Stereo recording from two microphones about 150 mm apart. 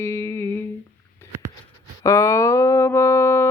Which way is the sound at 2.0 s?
20° left (ahead or behind).